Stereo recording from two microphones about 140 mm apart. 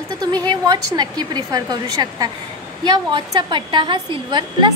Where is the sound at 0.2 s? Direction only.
30° right (ahead or behind).